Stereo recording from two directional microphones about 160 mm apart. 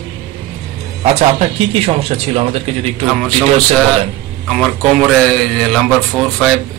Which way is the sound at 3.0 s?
5° left (ahead or behind).